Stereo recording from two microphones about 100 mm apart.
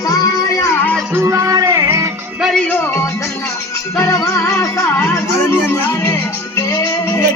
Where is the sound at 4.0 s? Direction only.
30° left (ahead or behind).